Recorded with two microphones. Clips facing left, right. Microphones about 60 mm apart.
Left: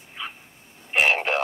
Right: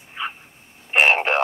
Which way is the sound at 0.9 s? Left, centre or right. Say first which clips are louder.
Right 4 dB; right.